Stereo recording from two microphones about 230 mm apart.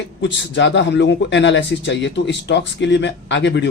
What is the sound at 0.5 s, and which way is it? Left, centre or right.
Speech, left.